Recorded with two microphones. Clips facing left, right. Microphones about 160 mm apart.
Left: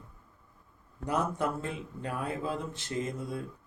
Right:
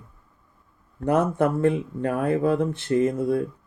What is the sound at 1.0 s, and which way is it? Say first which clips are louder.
Speech: right 10 dB; 55° right (ahead or behind).